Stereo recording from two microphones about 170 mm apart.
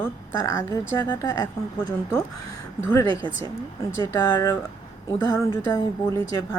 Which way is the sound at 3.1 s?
30° right (ahead or behind).